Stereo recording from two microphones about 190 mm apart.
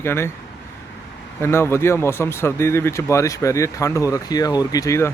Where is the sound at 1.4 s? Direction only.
10° left (ahead or behind).